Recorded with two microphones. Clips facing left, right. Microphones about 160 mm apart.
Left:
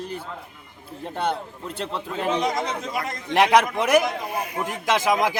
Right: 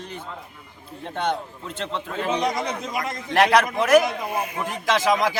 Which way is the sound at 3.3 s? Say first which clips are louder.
Left 1 dB; 15° left (ahead or behind).